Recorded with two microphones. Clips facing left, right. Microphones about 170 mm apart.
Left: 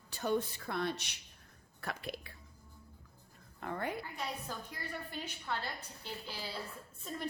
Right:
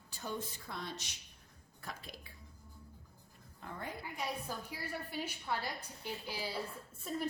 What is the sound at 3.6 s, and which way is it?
Speech, 65° left (ahead or behind).